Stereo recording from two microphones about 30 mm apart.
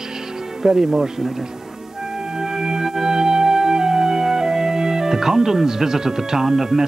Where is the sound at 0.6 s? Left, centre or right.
Centre.